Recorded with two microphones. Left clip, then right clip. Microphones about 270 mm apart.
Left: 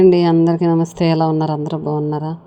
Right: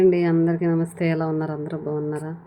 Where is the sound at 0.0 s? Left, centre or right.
Left.